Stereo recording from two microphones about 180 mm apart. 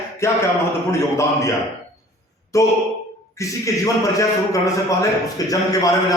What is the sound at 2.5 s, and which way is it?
A man's voice, 15° left (ahead or behind).